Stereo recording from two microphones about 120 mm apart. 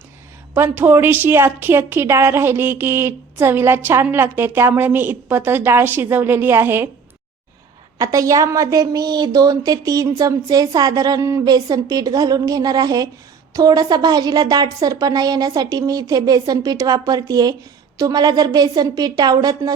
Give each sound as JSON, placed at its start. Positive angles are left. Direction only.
{"t": 0.5, "sound": "a woman's voice", "side_deg": -15}
{"t": 7.9, "sound": "a woman's voice", "side_deg": -30}